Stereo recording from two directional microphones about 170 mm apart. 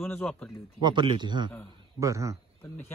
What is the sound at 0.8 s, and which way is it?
Speech, 25° right (ahead or behind).